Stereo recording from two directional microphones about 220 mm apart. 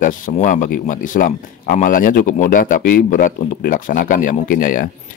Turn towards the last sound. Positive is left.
turn(degrees=40)  # may be behind; listen again after turning